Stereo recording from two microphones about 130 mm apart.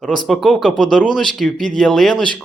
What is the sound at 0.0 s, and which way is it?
Speech, centre (ahead or behind).